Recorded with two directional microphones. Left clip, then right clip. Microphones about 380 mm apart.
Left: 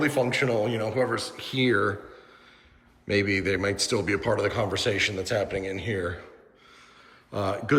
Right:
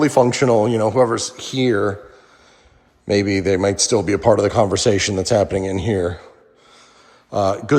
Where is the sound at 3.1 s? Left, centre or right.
Centre.